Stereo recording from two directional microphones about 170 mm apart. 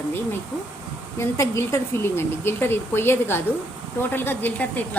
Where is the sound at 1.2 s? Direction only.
15° left (ahead or behind).